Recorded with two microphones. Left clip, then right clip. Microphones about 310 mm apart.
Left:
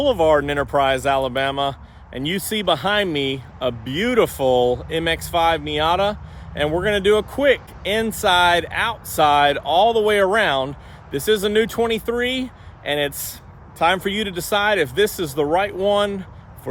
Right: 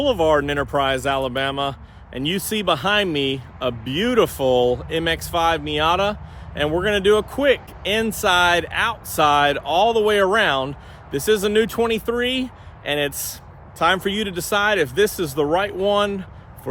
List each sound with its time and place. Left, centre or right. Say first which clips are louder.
0.0 s speech: left 1 dB; centre